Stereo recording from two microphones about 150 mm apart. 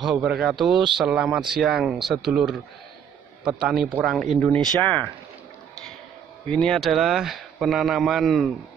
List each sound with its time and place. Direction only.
0.0 s speech: 5° right (ahead or behind)
4.4 s speech: 10° left (ahead or behind)
6.5 s speech: 5° left (ahead or behind)